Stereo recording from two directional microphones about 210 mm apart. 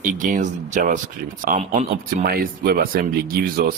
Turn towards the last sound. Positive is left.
turn(degrees=-45)  # may be behind; listen again after turning